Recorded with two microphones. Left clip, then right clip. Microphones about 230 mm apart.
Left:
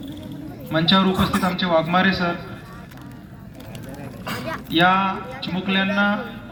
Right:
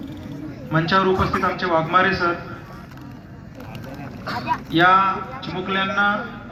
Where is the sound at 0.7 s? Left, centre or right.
Left.